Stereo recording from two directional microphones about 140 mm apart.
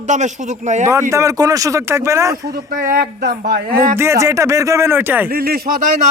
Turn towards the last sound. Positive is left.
turn(degrees=-90)